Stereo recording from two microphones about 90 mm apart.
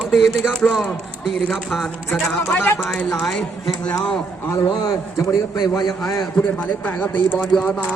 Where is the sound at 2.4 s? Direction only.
20° left (ahead or behind).